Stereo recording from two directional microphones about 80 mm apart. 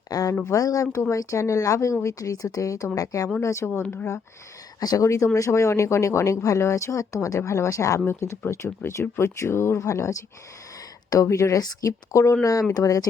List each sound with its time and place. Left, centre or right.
0.1 s a sound: left
0.4 s speech: left
4.8 s speech: left
5.0 s speech: left